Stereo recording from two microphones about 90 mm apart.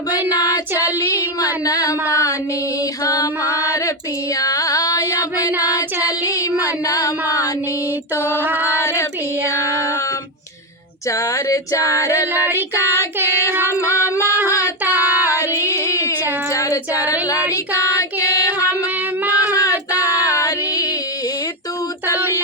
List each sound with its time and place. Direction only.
1.6 s a sound: 40° left (ahead or behind)
3.0 s female singing: 45° left (ahead or behind)
4.4 s carnatic music: 40° left (ahead or behind)
6.6 s a sound: 40° left (ahead or behind)
8.1 s music: 25° left (ahead or behind)
8.8 s child singing: 30° left (ahead or behind)
11.1 s female singing: 35° left (ahead or behind)
12.3 s female singing: 25° right (ahead or behind)
13.9 s a sound: 25° right (ahead or behind)
15.4 s a sound: 30° left (ahead or behind)
16.5 s child singing: 40° left (ahead or behind)
20.0 s female singing: 40° left (ahead or behind)